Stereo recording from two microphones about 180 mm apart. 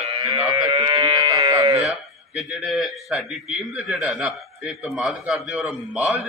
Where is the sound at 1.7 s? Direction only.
Centre (ahead or behind).